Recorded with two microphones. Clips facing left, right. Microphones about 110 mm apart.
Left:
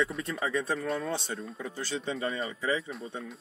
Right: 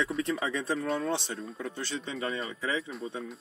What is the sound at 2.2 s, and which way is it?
Speech, centre (ahead or behind).